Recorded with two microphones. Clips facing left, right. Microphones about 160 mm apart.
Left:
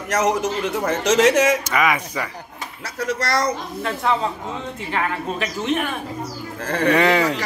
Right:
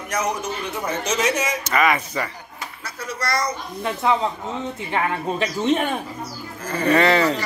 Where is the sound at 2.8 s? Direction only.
85° left.